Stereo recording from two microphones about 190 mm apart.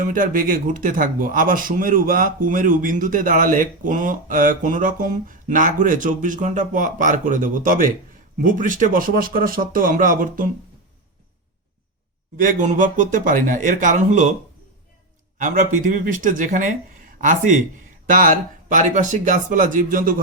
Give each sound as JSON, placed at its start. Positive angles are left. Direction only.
{"t": 0.0, "sound": "speech", "side_deg": -45}
{"t": 12.4, "sound": "speech", "side_deg": -45}
{"t": 15.4, "sound": "speech", "side_deg": -45}